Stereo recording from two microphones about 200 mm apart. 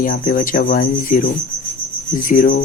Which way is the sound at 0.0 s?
45° left (ahead or behind).